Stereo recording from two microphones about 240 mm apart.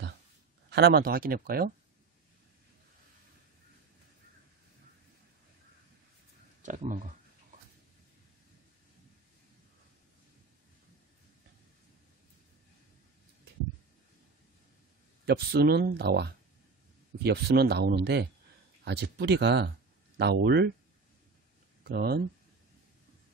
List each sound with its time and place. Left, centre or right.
0.7 s speech: right
6.6 s speech: right
15.2 s speech: right
21.8 s speech: right